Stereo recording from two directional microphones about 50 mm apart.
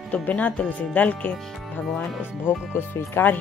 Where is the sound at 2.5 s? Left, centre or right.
Left.